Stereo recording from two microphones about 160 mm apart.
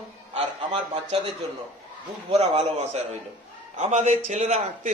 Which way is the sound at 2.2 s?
40° right (ahead or behind).